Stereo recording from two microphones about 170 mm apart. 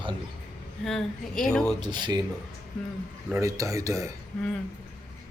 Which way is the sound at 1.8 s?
25° right (ahead or behind).